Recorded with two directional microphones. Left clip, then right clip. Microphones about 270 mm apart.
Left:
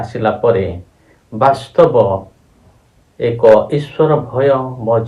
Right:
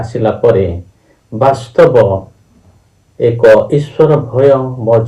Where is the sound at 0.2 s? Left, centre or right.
Left.